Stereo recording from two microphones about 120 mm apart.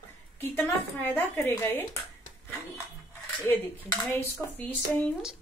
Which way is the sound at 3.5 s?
20° left (ahead or behind).